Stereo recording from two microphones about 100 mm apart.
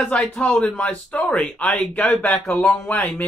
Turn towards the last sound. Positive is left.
turn(degrees=15)  # may be behind; listen again after turning